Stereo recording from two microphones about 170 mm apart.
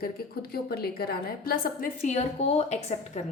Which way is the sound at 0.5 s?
65° left (ahead or behind).